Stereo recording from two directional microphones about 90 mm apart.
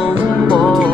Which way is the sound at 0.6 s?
Centre (ahead or behind).